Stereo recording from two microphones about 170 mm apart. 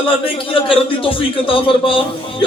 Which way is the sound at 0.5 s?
30° left (ahead or behind).